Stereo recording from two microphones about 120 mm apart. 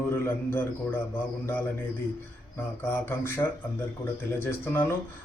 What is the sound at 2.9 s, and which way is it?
Speech, 20° left (ahead or behind).